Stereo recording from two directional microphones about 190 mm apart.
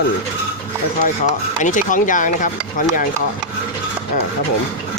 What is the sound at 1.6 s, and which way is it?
Speech, 45° left (ahead or behind).